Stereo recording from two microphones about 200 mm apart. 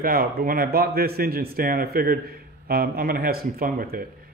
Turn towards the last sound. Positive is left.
turn(degrees=-45)  # may be behind; listen again after turning